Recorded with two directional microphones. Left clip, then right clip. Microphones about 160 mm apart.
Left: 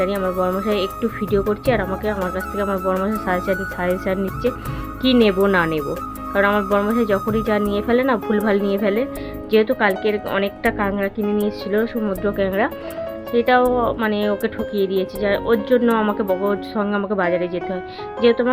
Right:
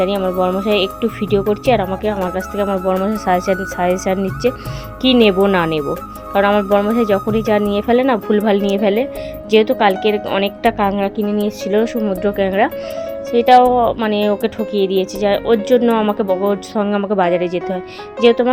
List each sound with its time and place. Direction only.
0.0 s speech: 15° right (ahead or behind)